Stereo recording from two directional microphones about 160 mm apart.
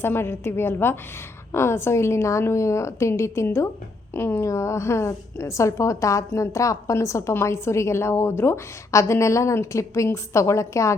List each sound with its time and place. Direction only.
0.0 s a woman's voice: 15° left (ahead or behind)